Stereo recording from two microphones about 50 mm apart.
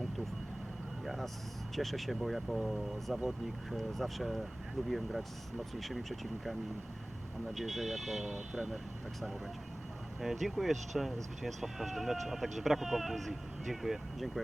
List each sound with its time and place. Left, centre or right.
1.0 s a sound: centre
1.7 s speech: centre
10.2 s speech: centre